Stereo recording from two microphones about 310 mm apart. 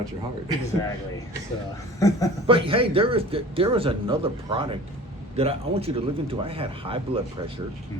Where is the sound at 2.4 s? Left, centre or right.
Centre.